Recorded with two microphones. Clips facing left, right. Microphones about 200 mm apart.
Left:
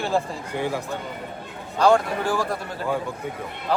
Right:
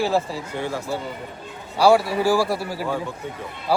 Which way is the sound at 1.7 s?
10° right (ahead or behind).